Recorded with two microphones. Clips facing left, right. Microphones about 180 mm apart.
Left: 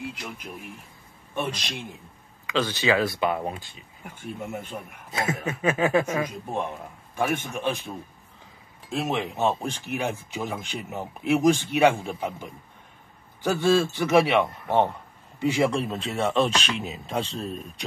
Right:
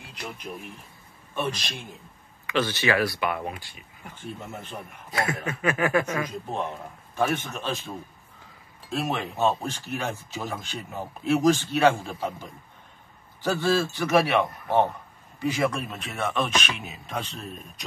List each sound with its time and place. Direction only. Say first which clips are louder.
1.3 s speech: even; 15° left (ahead or behind)
4.0 s speech: left 3 dB; 10° left (ahead or behind)
5.2 s speech: left 2 dB; 20° left (ahead or behind)
8.9 s speech: left 1 dB; 20° left (ahead or behind)
13.6 s speech: left 4 dB; 25° left (ahead or behind)